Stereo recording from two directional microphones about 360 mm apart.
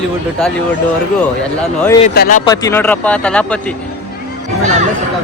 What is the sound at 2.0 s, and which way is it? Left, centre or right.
Speech, left.